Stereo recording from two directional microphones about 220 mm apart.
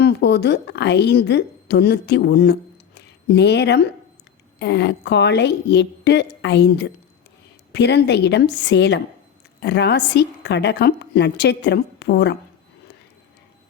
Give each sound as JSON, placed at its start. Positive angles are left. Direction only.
{"t": 0.0, "sound": "a woman's voice", "side_deg": 50}